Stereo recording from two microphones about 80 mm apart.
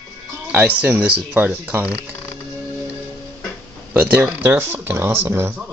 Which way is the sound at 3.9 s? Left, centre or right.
Centre.